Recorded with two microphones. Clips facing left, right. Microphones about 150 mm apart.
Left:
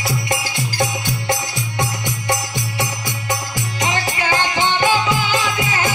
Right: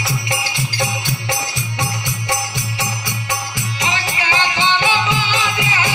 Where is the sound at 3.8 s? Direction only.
50° left (ahead or behind).